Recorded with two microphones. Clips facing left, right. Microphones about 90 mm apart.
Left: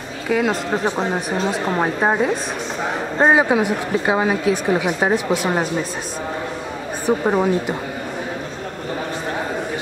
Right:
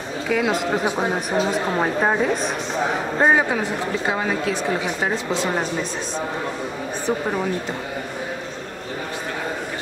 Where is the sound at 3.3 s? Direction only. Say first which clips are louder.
Left 4 dB; 15° left (ahead or behind).